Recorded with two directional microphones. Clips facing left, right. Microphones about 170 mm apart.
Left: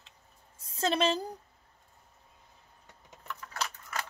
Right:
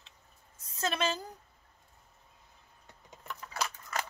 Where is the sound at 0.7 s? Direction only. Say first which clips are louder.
Left 4 dB; 30° left (ahead or behind).